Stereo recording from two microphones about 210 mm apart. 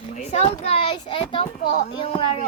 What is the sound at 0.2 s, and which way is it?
A child's voice, 30° left (ahead or behind).